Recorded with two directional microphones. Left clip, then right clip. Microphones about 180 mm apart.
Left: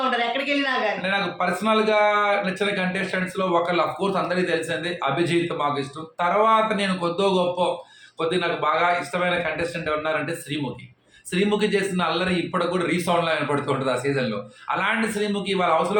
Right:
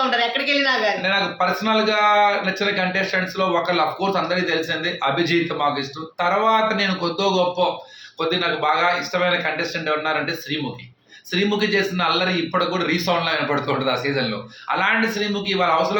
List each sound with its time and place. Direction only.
0.1 s a sound: 15° right (ahead or behind)
1.0 s a man's voice: 15° left (ahead or behind)
11.3 s a man's voice: 15° left (ahead or behind)